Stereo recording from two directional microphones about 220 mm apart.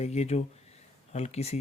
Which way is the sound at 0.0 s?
30° left (ahead or behind).